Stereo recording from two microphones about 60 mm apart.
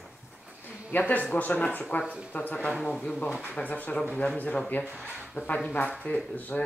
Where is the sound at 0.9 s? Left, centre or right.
Left.